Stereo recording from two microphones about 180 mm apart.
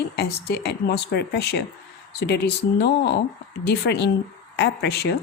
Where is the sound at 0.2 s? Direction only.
60° left (ahead or behind).